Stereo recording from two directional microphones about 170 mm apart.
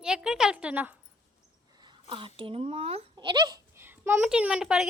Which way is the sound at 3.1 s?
25° right (ahead or behind).